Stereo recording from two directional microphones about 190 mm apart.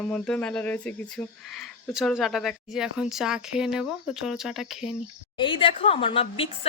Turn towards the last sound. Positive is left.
turn(degrees=30)  # may be behind; listen again after turning